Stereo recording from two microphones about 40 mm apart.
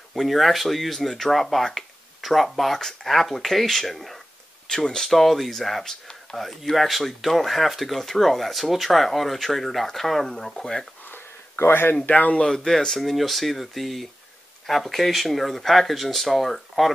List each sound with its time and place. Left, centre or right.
0.1 s speech: centre
4.6 s speech: centre
11.1 s a sound: left
12.1 s speech: left
12.4 s speech: centre